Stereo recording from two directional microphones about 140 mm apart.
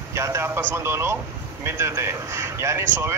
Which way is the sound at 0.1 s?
20° right (ahead or behind).